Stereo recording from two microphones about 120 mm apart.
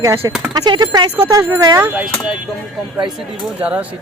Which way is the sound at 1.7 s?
15° right (ahead or behind).